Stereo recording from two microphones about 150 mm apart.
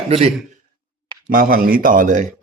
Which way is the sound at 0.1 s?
45° right (ahead or behind).